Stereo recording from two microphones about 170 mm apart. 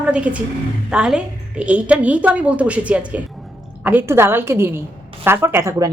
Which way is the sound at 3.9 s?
15° right (ahead or behind).